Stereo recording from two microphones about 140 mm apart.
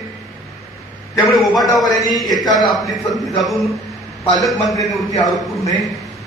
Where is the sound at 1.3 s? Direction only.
Centre (ahead or behind).